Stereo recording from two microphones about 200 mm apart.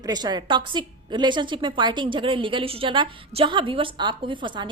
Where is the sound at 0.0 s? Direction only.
20° right (ahead or behind).